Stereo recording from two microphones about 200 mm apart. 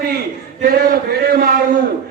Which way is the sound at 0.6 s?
45° right (ahead or behind).